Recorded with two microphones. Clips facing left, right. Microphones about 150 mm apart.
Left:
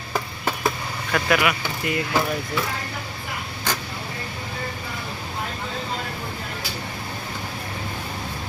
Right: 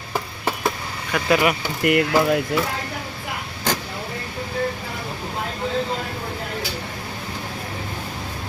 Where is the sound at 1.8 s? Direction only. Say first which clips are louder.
Right 7 dB; 70° right (ahead or behind).